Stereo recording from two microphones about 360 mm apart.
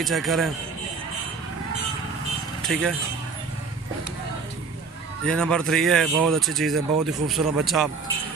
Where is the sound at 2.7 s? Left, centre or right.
Centre.